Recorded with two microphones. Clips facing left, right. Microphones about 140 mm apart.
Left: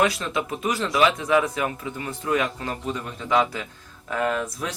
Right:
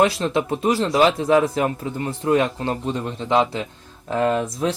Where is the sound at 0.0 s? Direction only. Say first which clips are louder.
Right 5 dB; 30° right (ahead or behind).